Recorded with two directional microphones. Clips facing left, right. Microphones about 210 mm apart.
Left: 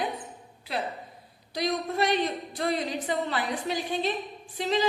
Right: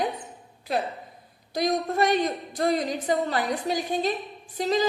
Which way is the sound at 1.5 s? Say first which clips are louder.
Right 4 dB; 45° right (ahead or behind).